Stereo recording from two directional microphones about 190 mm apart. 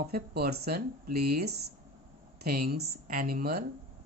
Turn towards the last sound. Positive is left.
turn(degrees=-50)  # may be behind; listen again after turning